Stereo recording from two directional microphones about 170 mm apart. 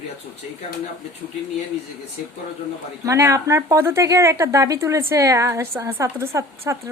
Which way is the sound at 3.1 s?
20° right (ahead or behind).